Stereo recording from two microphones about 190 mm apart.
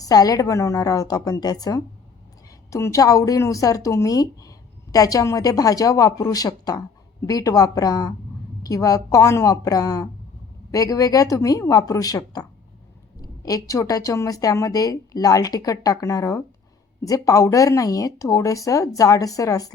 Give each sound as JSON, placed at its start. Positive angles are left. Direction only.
{"t": 0.0, "sound": "speech", "side_deg": 20}